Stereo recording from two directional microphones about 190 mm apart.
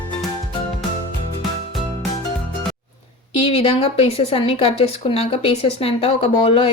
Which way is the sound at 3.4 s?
30° left (ahead or behind).